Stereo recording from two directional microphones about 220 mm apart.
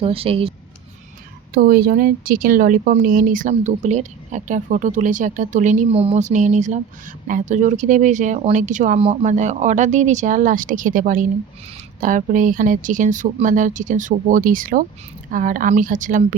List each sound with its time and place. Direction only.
0.0 s speech: 25° right (ahead or behind)
1.5 s speech: 40° right (ahead or behind)